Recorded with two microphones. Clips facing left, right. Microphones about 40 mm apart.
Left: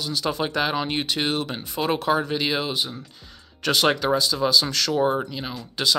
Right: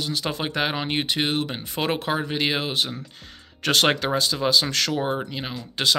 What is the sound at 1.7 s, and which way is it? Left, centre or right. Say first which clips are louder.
Speech: left 3 dB; right.